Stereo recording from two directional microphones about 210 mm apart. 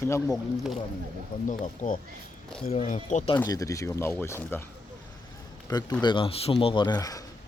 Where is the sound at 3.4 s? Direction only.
15° left (ahead or behind).